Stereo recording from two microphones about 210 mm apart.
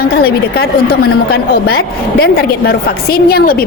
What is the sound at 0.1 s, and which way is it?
A woman's voice, 50° left (ahead or behind).